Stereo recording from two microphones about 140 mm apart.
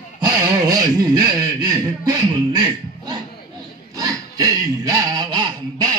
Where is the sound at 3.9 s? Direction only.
25° right (ahead or behind).